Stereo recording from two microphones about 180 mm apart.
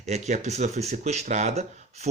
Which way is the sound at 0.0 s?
40° right (ahead or behind).